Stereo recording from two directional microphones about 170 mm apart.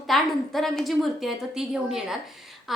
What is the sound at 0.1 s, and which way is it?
A woman's voice, centre (ahead or behind).